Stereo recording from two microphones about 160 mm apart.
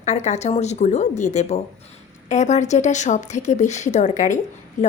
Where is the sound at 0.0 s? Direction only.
45° left (ahead or behind).